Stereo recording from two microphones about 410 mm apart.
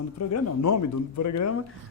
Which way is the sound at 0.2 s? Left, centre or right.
Left.